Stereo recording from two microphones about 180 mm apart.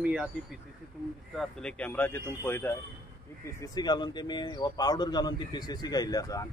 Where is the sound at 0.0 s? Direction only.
5° right (ahead or behind).